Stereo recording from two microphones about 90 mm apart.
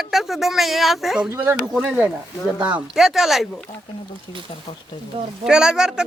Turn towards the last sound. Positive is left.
turn(degrees=-5)  # may be behind; listen again after turning